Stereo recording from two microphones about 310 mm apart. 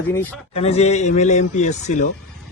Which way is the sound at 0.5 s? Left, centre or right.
Centre.